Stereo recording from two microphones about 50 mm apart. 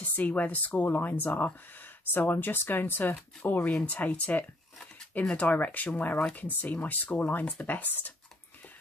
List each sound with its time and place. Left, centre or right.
0.0 s speech: left